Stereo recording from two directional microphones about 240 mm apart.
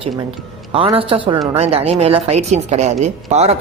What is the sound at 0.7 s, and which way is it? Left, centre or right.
Speech, right.